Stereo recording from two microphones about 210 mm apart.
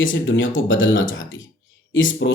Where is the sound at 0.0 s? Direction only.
65° left (ahead or behind).